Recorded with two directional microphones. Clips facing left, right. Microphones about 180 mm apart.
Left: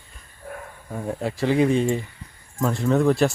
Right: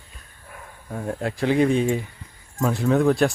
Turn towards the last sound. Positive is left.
turn(degrees=0)  # may be behind; listen again after turning